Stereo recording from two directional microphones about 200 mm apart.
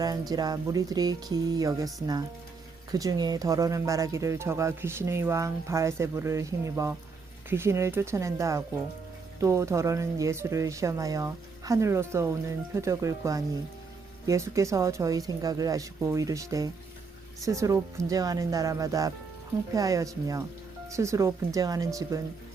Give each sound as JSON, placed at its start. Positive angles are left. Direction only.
{"t": 0.0, "sound": "speech", "side_deg": -20}